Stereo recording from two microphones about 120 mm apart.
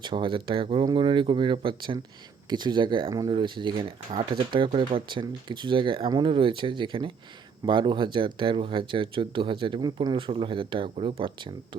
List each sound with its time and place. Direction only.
0.0 s speech: 45° right (ahead or behind)